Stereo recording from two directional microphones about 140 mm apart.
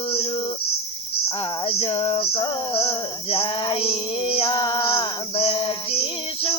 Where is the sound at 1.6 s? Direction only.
40° left (ahead or behind).